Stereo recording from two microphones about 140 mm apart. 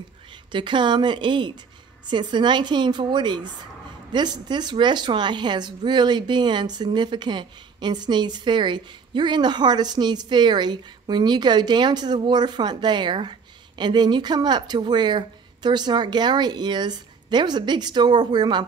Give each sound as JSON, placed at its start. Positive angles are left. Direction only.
{"t": 0.5, "sound": "speech", "side_deg": -35}